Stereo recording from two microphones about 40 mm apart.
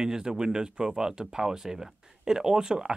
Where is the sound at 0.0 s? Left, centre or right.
Centre.